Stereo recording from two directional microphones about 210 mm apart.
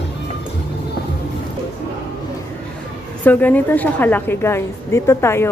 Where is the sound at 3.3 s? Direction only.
10° left (ahead or behind).